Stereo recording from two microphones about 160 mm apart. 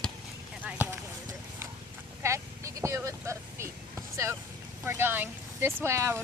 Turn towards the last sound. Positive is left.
turn(degrees=-15)  # may be behind; listen again after turning